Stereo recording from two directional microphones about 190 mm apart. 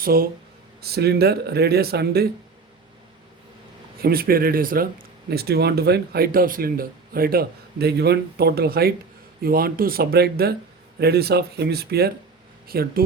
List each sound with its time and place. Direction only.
0.0 s speech: 50° right (ahead or behind)
4.0 s speech: 50° right (ahead or behind)